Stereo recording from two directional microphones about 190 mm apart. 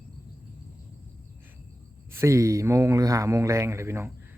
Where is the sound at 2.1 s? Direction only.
15° right (ahead or behind).